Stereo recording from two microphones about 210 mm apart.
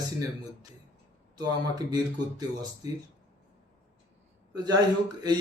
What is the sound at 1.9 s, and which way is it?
Speech, 20° right (ahead or behind).